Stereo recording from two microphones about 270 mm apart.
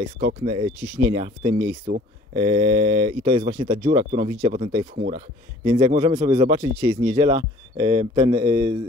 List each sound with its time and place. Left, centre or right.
0.2 s a man's voice: right